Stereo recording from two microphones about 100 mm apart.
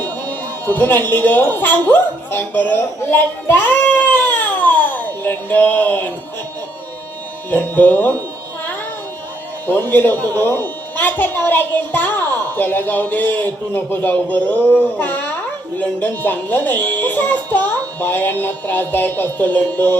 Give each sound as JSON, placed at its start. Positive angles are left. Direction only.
{"t": 0.7, "sound": "a woman's voice", "side_deg": 20}
{"t": 7.5, "sound": "a child's voice", "side_deg": 20}
{"t": 9.6, "sound": "a child's voice", "side_deg": 20}